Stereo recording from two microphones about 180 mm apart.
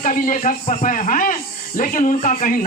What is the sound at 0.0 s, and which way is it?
A man's voice, 45° left (ahead or behind).